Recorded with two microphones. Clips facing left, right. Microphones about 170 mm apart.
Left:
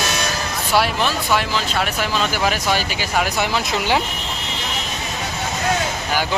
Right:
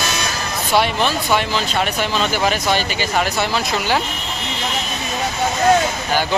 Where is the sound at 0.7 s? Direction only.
Centre (ahead or behind); by 4.0 s 20° left (ahead or behind).